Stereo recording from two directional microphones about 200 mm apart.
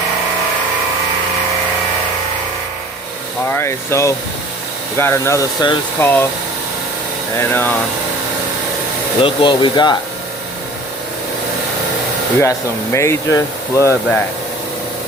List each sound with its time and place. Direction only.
3.5 s speech: 15° left (ahead or behind)
7.3 s speech: 10° left (ahead or behind)
9.2 s speech: 25° left (ahead or behind)
12.4 s speech: 15° left (ahead or behind)